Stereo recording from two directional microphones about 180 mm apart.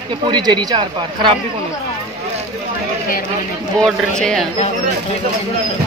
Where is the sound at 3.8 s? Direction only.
5° left (ahead or behind).